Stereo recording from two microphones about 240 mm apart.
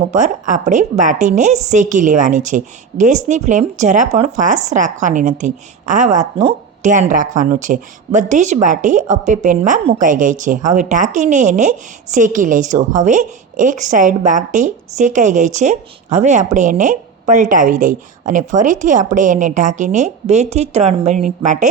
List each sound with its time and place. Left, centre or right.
0.0 s a woman's voice: right